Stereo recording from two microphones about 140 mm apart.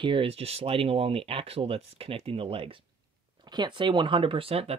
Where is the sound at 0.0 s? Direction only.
35° right (ahead or behind).